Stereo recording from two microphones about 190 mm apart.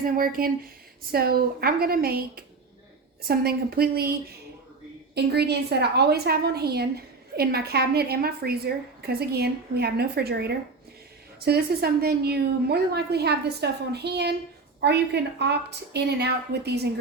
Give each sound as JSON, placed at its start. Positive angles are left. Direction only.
{"t": 0.0, "sound": "a woman's voice", "side_deg": -50}
{"t": 5.1, "sound": "a woman's voice", "side_deg": -60}